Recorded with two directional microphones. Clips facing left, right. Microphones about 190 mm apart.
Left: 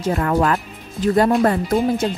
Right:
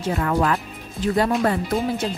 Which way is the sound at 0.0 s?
45° left (ahead or behind).